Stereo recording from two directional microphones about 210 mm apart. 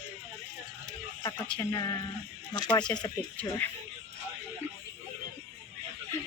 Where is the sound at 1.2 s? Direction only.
20° left (ahead or behind).